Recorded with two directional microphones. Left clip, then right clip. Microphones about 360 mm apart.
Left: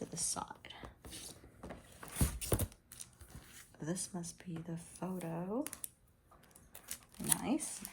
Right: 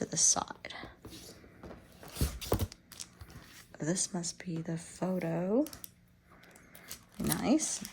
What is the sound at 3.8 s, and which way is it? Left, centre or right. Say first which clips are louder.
Speech: right 8 dB; centre.